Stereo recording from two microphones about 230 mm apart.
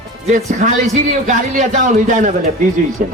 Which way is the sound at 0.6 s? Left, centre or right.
Right.